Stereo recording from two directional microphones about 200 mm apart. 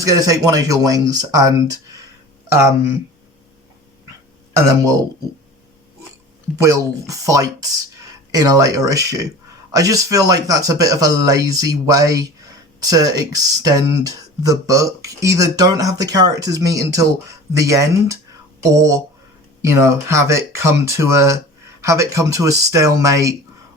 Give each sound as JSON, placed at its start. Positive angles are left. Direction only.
{"t": 0.0, "sound": "speech", "side_deg": -15}
{"t": 4.5, "sound": "speech", "side_deg": -15}
{"t": 6.6, "sound": "speech", "side_deg": -15}